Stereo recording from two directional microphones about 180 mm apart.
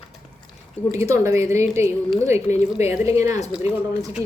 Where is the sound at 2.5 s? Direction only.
45° left (ahead or behind).